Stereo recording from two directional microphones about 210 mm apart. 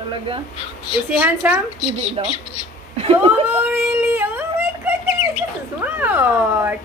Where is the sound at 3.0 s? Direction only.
30° right (ahead or behind).